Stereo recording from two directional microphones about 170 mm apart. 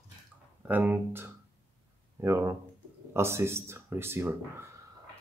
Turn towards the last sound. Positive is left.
turn(degrees=-15)  # may be behind; listen again after turning